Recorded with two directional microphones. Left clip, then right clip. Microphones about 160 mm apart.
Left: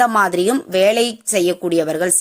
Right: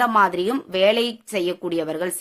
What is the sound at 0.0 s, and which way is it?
A woman's voice, 35° left (ahead or behind).